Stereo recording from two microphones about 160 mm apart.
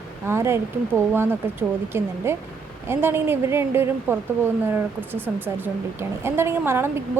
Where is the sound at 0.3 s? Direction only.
15° right (ahead or behind).